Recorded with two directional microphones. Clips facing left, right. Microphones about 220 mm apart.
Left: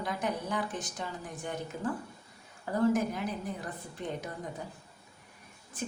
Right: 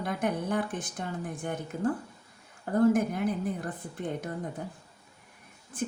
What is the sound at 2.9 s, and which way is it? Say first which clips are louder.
Speech: right 4 dB; 55° right (ahead or behind).